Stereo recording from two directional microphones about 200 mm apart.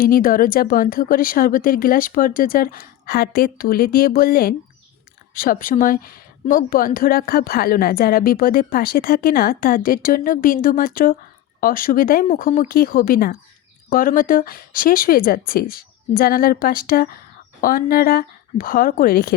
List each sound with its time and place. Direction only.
0.0 s speech: 45° left (ahead or behind)